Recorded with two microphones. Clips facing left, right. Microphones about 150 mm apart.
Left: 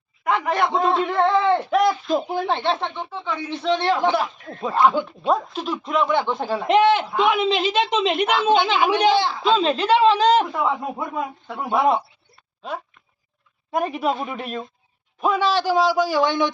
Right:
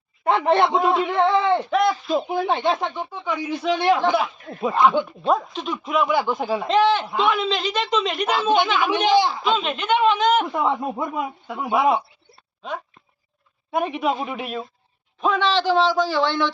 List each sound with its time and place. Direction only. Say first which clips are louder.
0.3 s speech: right 3 dB; 30° right (ahead or behind)
0.8 s a woman's voice: even; 5° right (ahead or behind)
2.5 s a woman's voice: right 1 dB; 10° right (ahead or behind)
6.7 s a woman's voice: left 3 dB; 20° left (ahead or behind)
9.1 s speech: right 3 dB; 15° right (ahead or behind)
9.4 s speech: left 4 dB; 35° left (ahead or behind)
10.5 s speech: right 1 dB; 20° right (ahead or behind)
11.4 s a woman's voice: even; 5° right (ahead or behind)
13.7 s a woman's voice: even; centre (ahead or behind)
15.2 s a man's voice: even; 10° left (ahead or behind)